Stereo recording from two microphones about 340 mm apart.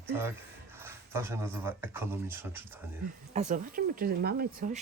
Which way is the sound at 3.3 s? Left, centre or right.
Right.